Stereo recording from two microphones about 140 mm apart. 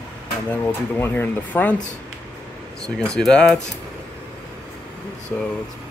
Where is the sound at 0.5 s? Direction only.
15° left (ahead or behind).